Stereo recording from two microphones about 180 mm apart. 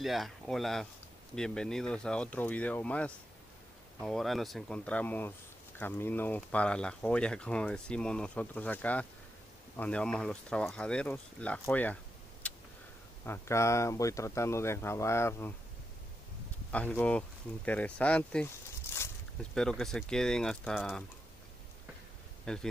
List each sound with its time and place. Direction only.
0.0 s speech: centre (ahead or behind)
12.4 s tick: 5° left (ahead or behind)
13.2 s speech: 15° left (ahead or behind)
16.7 s speech: 10° left (ahead or behind)
19.5 s speech: 5° left (ahead or behind)
22.4 s speech: 5° left (ahead or behind)